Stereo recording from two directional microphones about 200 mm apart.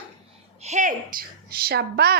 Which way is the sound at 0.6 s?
35° right (ahead or behind).